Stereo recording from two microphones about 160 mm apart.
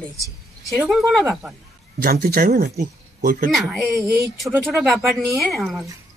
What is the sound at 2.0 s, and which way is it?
Speech, 70° right (ahead or behind).